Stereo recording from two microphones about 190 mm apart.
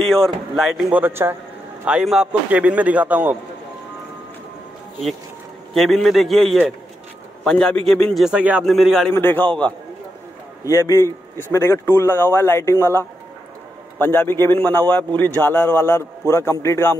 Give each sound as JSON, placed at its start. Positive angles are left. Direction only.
{"t": 0.0, "sound": "a man's voice", "side_deg": 0}
{"t": 5.7, "sound": "a man's voice", "side_deg": 0}
{"t": 9.1, "sound": "a man's voice", "side_deg": 10}
{"t": 10.6, "sound": "a man's voice", "side_deg": 15}